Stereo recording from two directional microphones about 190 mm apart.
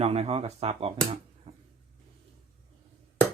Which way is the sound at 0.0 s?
35° right (ahead or behind).